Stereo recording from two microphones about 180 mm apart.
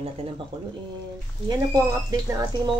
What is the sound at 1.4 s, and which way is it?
Speech, 20° right (ahead or behind).